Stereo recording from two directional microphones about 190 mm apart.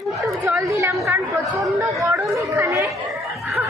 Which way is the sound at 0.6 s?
15° right (ahead or behind).